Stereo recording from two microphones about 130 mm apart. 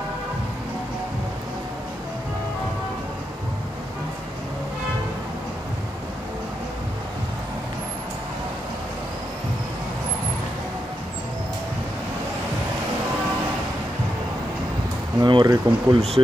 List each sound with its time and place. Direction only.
15.1 s speech: 35° right (ahead or behind)